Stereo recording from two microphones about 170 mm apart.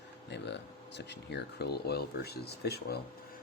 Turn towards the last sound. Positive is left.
turn(degrees=70)  # may be behind; listen again after turning